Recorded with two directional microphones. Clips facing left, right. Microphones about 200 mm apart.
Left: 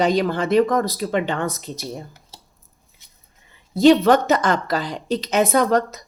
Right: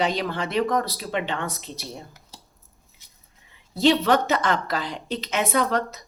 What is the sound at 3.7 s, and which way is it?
A woman's voice, 45° left (ahead or behind).